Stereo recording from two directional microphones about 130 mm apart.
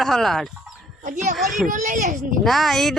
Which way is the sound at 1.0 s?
70° right (ahead or behind).